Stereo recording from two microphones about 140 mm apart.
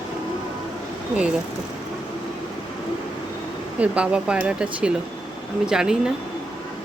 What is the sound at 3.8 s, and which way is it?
Speech, 10° right (ahead or behind).